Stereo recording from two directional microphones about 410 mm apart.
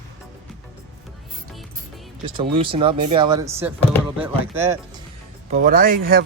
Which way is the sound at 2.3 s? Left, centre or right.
Centre.